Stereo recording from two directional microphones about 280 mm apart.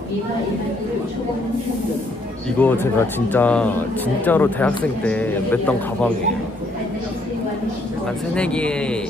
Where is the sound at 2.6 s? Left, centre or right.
Centre.